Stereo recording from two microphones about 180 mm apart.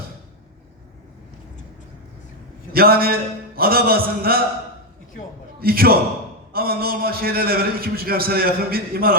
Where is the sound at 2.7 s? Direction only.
55° right (ahead or behind).